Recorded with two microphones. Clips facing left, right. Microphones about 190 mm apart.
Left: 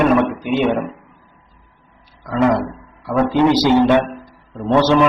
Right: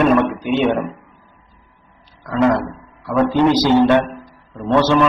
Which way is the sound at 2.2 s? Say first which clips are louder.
Even; 10° left (ahead or behind).